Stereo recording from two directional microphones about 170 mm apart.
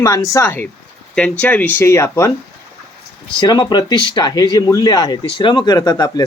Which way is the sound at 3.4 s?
25° left (ahead or behind).